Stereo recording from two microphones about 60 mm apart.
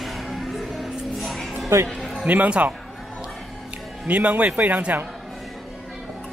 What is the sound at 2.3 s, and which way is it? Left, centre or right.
Speech, right.